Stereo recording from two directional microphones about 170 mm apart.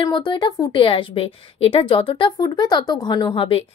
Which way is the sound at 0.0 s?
25° left (ahead or behind).